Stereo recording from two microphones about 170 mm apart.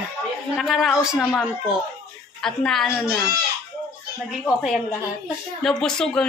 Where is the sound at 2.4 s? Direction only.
Centre (ahead or behind).